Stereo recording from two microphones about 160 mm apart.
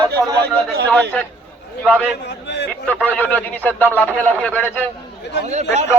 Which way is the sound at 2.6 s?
10° left (ahead or behind).